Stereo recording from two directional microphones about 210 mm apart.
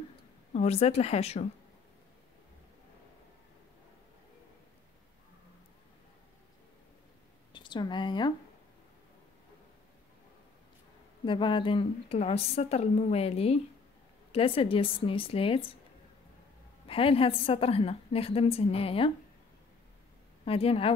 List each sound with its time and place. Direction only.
0.5 s a woman's voice: 30° left (ahead or behind)
7.5 s a woman's voice: 20° left (ahead or behind)
11.2 s a woman's voice: 25° left (ahead or behind)
16.8 s a woman's voice: 25° left (ahead or behind)
20.4 s a woman's voice: 25° left (ahead or behind)